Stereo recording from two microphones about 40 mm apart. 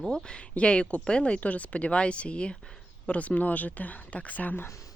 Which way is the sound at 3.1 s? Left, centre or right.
Left.